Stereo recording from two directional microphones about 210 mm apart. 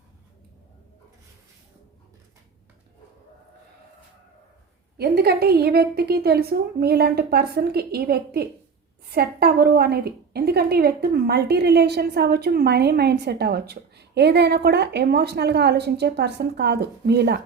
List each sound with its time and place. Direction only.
4.9 s a woman's voice: 50° right (ahead or behind)